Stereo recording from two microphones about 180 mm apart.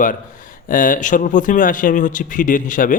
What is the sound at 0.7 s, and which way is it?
Speech, 50° left (ahead or behind).